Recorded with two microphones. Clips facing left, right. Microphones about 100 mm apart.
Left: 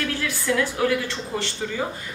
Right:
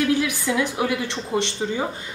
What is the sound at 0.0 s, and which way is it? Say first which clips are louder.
A woman's voice: right 6 dB; 15° right (ahead or behind).